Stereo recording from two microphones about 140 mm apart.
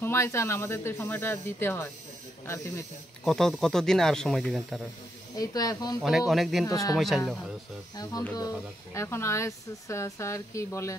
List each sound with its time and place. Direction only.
0.0 s speech: 20° left (ahead or behind)
3.3 s speech: 5° left (ahead or behind)
5.3 s speech: 25° left (ahead or behind)
6.0 s speech: centre (ahead or behind)
6.6 s speech: 25° left (ahead or behind)
7.0 s speech: centre (ahead or behind)
7.9 s speech: 30° left (ahead or behind)